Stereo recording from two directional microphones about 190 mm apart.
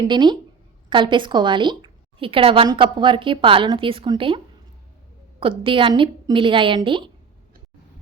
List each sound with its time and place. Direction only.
0.0 s a woman's voice: 25° right (ahead or behind)
5.4 s a woman's voice: 30° right (ahead or behind)